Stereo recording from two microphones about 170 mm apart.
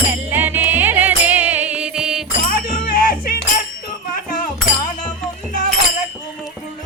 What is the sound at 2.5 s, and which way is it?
Music, 55° left (ahead or behind).